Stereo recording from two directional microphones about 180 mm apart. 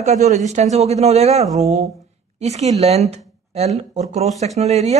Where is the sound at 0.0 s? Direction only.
40° right (ahead or behind).